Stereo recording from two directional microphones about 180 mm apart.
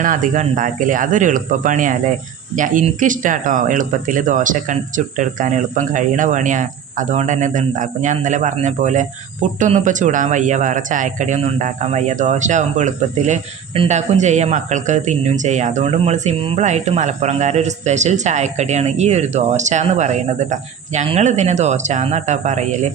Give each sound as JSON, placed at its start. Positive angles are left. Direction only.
{"t": 0.0, "sound": "speech", "side_deg": -45}